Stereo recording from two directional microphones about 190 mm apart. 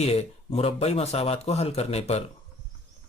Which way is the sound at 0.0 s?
35° left (ahead or behind).